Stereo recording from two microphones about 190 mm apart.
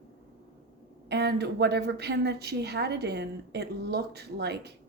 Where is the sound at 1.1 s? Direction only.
60° right (ahead or behind).